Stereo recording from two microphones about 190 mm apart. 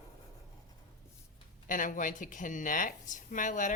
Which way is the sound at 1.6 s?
45° left (ahead or behind).